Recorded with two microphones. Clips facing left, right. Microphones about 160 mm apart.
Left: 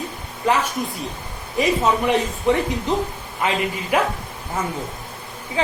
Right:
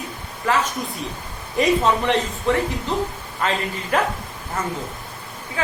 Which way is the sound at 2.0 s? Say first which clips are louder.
Left 2 dB; 15° left (ahead or behind).